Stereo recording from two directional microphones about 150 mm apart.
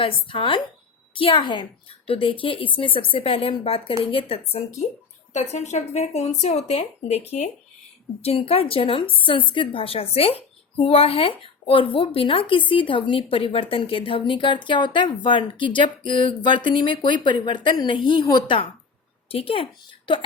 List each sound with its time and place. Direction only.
0.0 s a woman's voice: 35° left (ahead or behind)
5.3 s a woman's voice: 50° left (ahead or behind); by 20.2 s 35° left (ahead or behind)